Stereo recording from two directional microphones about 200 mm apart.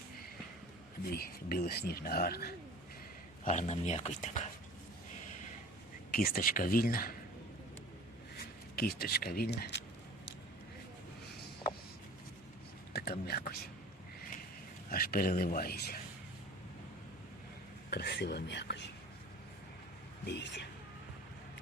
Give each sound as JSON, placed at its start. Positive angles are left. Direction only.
{"t": 1.1, "sound": "speech", "side_deg": 50}
{"t": 3.4, "sound": "speech", "side_deg": 35}
{"t": 6.1, "sound": "speech", "side_deg": 45}
{"t": 8.4, "sound": "speech", "side_deg": 50}
{"t": 12.9, "sound": "a sound", "side_deg": 50}
{"t": 14.8, "sound": "speech", "side_deg": 50}
{"t": 17.9, "sound": "speech", "side_deg": 55}
{"t": 20.2, "sound": "speech", "side_deg": 60}